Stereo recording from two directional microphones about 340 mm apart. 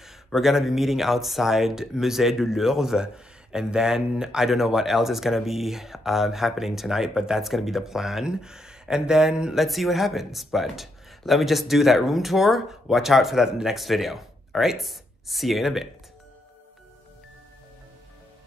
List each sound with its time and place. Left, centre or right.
0.0 s speech: centre